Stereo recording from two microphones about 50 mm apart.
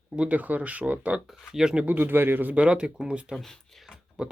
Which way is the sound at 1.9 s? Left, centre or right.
Right.